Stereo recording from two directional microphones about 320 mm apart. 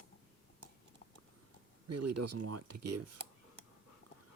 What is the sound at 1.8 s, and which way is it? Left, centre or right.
Speech, right.